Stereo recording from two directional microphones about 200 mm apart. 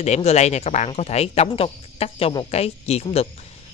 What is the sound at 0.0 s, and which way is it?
Speech, 35° left (ahead or behind).